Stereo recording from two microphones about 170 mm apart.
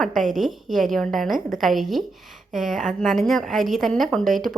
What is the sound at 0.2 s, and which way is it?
A woman's voice, centre (ahead or behind).